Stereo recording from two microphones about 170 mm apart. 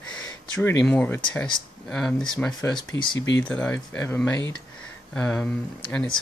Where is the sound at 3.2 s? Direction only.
90° left.